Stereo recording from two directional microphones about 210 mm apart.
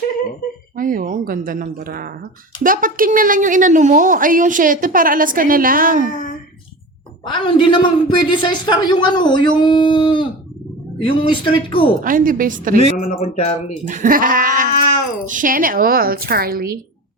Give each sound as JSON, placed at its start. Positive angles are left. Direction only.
{"t": 0.8, "sound": "a woman's voice", "side_deg": -40}
{"t": 7.3, "sound": "a man's voice", "side_deg": 25}
{"t": 12.0, "sound": "a woman's voice", "side_deg": -40}
{"t": 13.0, "sound": "a man's voice", "side_deg": 30}
{"t": 13.8, "sound": "a woman's voice", "side_deg": -35}